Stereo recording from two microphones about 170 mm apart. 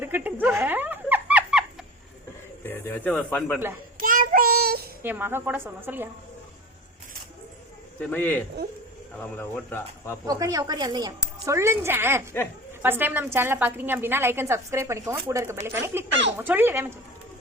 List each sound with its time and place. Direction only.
0.0 s a sound: 10° right (ahead or behind)
2.6 s speech: 10° left (ahead or behind)
4.0 s child singing: 55° right (ahead or behind)
5.0 s a woman's voice: 10° right (ahead or behind)
8.0 s speech: 10° left (ahead or behind)
10.2 s a woman's voice: 20° right (ahead or behind)